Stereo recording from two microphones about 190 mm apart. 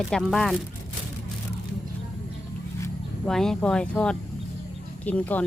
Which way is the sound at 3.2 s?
5° left (ahead or behind).